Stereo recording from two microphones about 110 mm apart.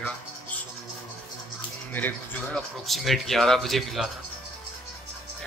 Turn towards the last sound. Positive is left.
turn(degrees=0)  # may be behind; listen again after turning